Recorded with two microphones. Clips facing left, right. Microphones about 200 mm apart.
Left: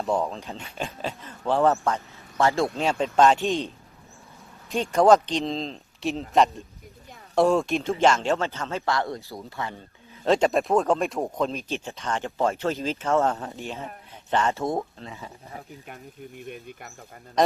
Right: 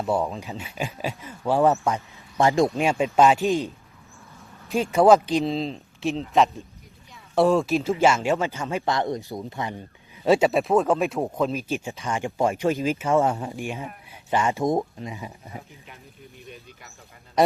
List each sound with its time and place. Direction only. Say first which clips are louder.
0.0 s speech: right 1 dB; 5° right (ahead or behind)
4.7 s speech: right 1 dB; 5° right (ahead or behind)
16.5 s speech: left 4 dB; 55° left (ahead or behind)